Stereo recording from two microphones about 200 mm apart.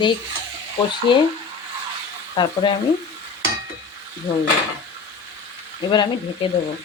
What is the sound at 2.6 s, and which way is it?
Speech, 20° left (ahead or behind).